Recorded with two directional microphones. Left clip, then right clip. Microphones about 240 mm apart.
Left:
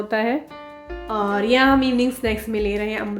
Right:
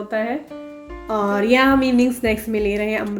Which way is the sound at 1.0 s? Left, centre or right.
Centre.